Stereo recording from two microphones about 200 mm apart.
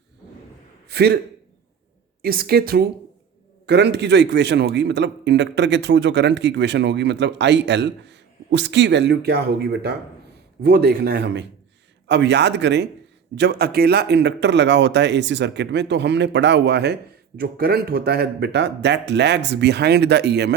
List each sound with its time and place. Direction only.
0.9 s a man's voice: 55° right (ahead or behind)
2.2 s speech: 50° right (ahead or behind)